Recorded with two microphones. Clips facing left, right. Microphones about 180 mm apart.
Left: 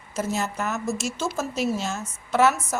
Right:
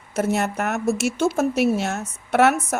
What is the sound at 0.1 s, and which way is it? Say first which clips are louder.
A woman's voice: right 5 dB; 65° right (ahead or behind).